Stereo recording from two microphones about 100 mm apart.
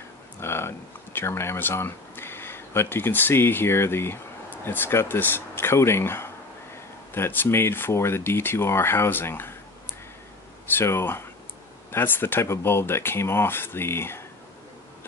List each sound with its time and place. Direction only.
0.4 s speech: 25° left (ahead or behind)
10.7 s speech: 25° left (ahead or behind)